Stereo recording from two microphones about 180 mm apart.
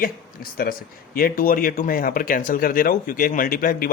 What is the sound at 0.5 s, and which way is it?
Speech, 55° left (ahead or behind).